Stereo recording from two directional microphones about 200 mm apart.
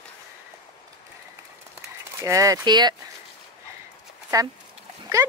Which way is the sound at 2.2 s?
15° right (ahead or behind).